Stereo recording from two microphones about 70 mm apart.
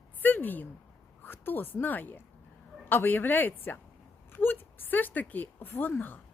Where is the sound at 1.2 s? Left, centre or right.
Left.